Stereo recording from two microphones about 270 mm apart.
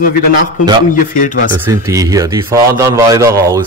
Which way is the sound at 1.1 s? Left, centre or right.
Left.